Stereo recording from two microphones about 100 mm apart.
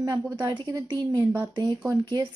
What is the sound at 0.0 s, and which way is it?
A woman's voice, 40° right (ahead or behind).